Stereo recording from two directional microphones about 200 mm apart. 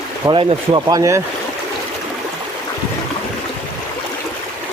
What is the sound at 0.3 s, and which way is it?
Speech, 20° right (ahead or behind).